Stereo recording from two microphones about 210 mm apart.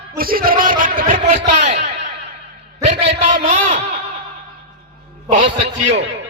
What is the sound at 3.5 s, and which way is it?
Speech, 35° right (ahead or behind).